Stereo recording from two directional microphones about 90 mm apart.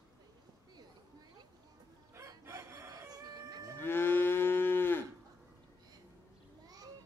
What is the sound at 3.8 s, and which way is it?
Moo, 25° left (ahead or behind).